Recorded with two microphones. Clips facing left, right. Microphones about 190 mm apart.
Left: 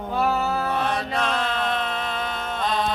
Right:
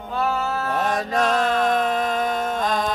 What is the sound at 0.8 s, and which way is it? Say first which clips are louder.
Mantra: right 3 dB; 45° right (ahead or behind).